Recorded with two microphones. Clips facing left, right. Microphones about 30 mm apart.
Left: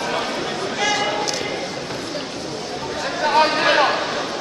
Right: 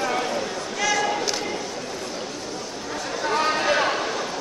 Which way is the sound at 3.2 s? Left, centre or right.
Left.